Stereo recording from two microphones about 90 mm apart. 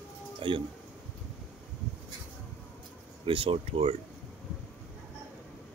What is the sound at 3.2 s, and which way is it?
Speech, 85° right.